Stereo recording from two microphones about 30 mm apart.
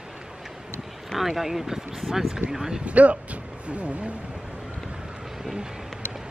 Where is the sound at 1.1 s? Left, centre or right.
Centre.